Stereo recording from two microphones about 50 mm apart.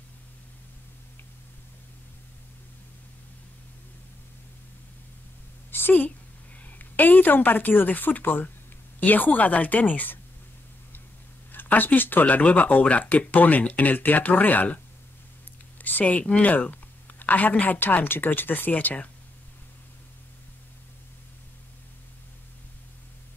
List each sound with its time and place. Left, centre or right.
5.7 s a sound: left
6.6 s a woman's voice: left
11.5 s speech: left
15.8 s speech: left